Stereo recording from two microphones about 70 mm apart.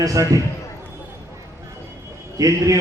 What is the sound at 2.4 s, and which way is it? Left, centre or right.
Speech, right.